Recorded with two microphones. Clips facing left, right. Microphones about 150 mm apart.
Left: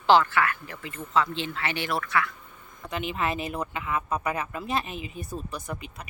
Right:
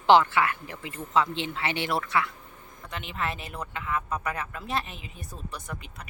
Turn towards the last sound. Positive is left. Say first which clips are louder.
# left 4 dB
turn(degrees=10)  # may be behind; listen again after turning